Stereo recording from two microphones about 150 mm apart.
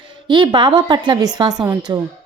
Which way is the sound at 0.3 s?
30° right (ahead or behind).